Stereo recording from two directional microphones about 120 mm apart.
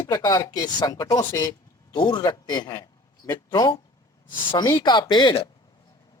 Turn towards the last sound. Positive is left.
turn(degrees=40)  # may be behind; listen again after turning